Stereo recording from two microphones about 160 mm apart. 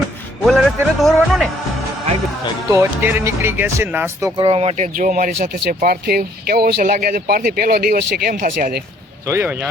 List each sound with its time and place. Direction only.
0.4 s music: centre (ahead or behind)
2.6 s speech: 15° right (ahead or behind)
4.4 s speech: 40° right (ahead or behind); by 8.8 s 65° right (ahead or behind)
9.2 s speech: 15° right (ahead or behind)